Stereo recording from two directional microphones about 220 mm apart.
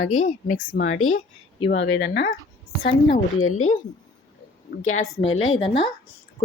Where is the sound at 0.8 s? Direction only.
65° left (ahead or behind).